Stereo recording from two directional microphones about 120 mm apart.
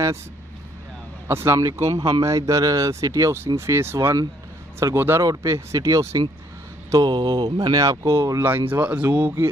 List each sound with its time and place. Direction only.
1.2 s speech: 20° right (ahead or behind)
2.0 s speech: 35° right (ahead or behind); by 9.3 s 10° right (ahead or behind)